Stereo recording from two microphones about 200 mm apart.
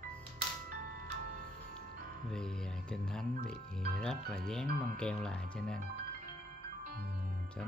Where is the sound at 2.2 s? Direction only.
5° left (ahead or behind).